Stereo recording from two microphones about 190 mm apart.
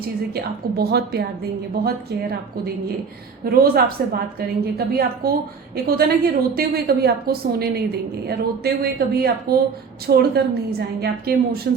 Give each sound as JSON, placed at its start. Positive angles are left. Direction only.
{"t": 0.3, "sound": "a woman's voice", "side_deg": -55}
{"t": 3.4, "sound": "a woman's voice", "side_deg": -50}